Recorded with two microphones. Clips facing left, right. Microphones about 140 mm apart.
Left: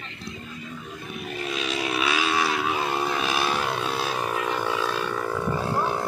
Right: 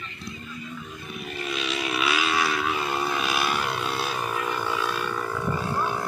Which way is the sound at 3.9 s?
20° left (ahead or behind).